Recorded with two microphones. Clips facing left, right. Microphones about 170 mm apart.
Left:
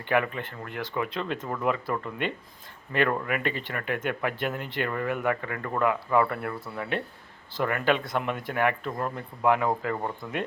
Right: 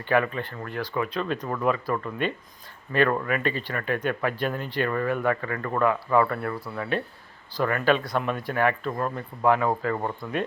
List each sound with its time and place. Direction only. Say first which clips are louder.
0.0 s speech: right 2 dB; 20° left (ahead or behind)